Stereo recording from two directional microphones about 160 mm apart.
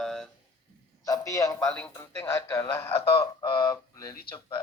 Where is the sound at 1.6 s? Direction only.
5° left (ahead or behind).